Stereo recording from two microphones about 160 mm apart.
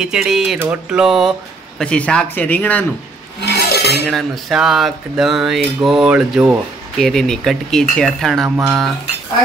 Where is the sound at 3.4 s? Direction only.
80° left.